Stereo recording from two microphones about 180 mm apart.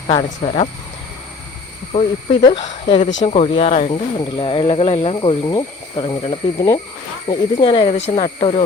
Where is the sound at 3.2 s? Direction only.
35° left (ahead or behind).